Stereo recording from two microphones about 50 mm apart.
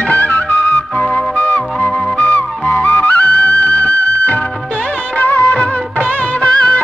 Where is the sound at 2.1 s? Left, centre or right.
Left.